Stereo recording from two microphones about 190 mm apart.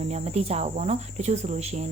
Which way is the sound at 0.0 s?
35° right (ahead or behind).